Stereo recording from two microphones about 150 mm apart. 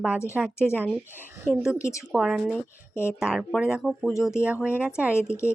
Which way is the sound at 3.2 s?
5° right (ahead or behind).